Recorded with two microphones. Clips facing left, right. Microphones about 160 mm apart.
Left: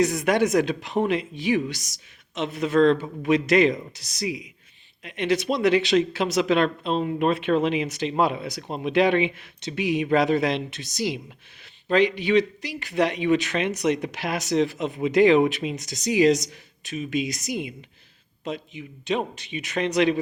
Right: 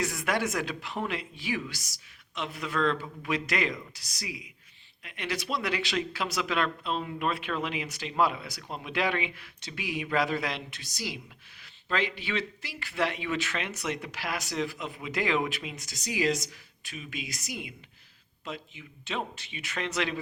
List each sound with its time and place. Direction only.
0.0 s speech: 20° left (ahead or behind)